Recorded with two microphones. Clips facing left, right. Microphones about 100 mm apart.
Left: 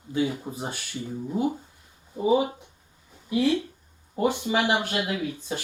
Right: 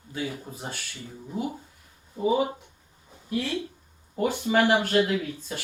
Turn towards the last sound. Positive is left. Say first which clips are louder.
# even
turn(degrees=20)  # may be behind; listen again after turning